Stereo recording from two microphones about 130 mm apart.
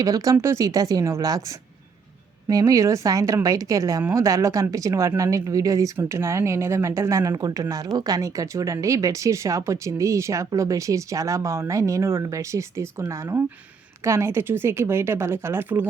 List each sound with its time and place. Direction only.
0.0 s speech: 25° right (ahead or behind)
2.5 s speech: 25° right (ahead or behind)